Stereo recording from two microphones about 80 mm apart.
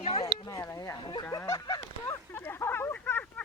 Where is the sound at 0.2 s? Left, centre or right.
Left.